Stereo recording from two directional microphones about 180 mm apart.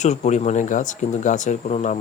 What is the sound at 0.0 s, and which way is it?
Speech, 40° left (ahead or behind).